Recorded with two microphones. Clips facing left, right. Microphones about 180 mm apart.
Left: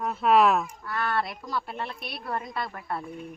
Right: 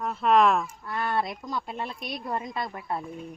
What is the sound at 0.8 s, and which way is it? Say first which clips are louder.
Speech: right 1 dB; 20° right (ahead or behind).